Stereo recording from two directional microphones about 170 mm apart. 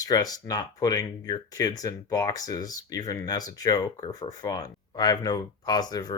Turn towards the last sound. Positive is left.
turn(degrees=25)  # may be behind; listen again after turning